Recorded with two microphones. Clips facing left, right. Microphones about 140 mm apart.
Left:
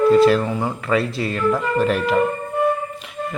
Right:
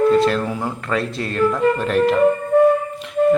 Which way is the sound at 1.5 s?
5° left (ahead or behind).